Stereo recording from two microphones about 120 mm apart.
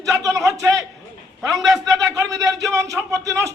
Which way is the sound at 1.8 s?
30° right (ahead or behind).